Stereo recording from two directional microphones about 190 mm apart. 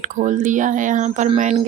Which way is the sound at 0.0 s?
40° right (ahead or behind).